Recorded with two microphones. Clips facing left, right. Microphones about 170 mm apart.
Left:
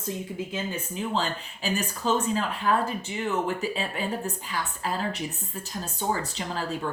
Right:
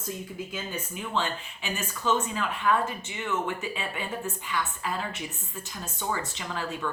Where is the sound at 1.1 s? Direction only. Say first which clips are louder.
Right 2 dB; 35° left (ahead or behind).